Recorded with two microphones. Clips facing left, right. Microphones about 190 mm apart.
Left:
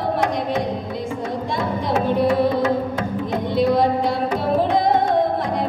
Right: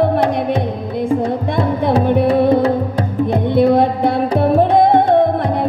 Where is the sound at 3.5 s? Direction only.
60° right (ahead or behind).